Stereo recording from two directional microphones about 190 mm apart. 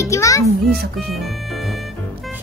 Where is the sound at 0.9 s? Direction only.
Centre (ahead or behind).